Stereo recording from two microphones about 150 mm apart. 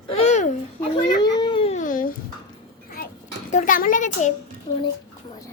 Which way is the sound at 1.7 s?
60° left (ahead or behind).